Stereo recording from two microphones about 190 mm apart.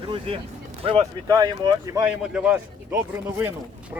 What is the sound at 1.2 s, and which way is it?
Speech, 20° right (ahead or behind).